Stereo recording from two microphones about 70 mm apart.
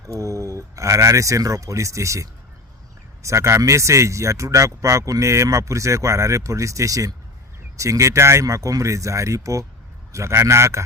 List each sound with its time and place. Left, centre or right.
0.0 s speech: right